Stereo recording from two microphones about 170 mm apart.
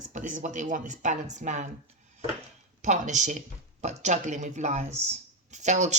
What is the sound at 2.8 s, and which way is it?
Speech, 45° right (ahead or behind).